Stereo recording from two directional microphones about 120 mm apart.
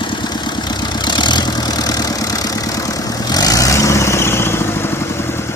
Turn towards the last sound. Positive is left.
turn(degrees=20)  # may be behind; listen again after turning